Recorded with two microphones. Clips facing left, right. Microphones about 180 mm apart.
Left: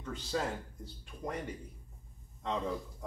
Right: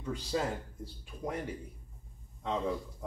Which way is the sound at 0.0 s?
10° right (ahead or behind).